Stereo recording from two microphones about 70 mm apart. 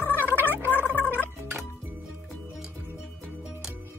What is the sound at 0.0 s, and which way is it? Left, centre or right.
Gargling, left.